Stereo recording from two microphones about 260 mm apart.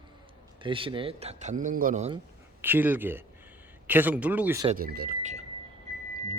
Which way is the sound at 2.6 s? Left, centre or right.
Centre.